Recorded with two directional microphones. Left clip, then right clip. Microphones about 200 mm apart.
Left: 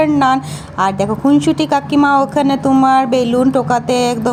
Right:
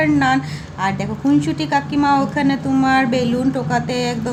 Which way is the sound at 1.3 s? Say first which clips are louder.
Left 3 dB; 30° left (ahead or behind).